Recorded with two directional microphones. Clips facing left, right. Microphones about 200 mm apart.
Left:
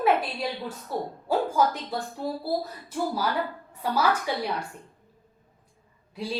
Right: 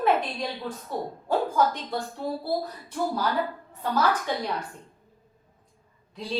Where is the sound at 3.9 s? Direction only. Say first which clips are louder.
Even; 10° left (ahead or behind).